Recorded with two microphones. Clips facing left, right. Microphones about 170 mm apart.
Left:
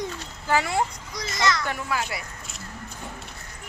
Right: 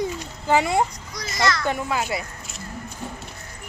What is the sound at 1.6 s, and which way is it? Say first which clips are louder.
Speech: right 4 dB; 20° right (ahead or behind).